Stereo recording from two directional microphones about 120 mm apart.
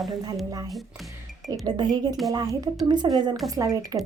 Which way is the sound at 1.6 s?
35° right (ahead or behind).